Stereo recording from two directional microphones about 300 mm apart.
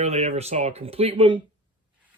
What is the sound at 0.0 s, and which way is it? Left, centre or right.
Speech, right.